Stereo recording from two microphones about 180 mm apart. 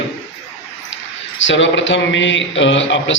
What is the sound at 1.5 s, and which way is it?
A man's voice, 90° left.